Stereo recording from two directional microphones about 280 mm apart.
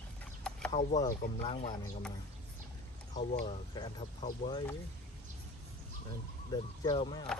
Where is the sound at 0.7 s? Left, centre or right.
Left.